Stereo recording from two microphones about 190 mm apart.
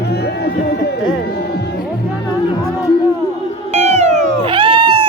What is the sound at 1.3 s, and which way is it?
Music, 55° left (ahead or behind).